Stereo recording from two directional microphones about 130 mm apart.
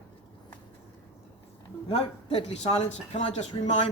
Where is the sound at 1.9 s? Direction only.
50° left (ahead or behind).